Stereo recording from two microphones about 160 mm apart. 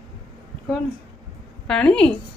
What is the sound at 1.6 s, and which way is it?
Speech, 5° left (ahead or behind).